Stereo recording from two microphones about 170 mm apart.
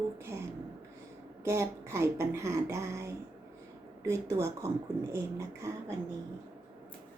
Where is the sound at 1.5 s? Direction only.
15° right (ahead or behind).